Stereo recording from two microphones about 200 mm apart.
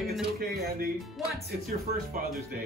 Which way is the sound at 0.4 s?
50° right (ahead or behind).